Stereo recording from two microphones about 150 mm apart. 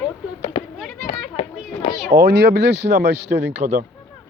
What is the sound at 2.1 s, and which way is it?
Speech, 90° right.